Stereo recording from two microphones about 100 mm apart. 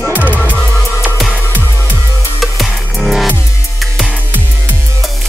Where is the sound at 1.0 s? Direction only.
Centre (ahead or behind).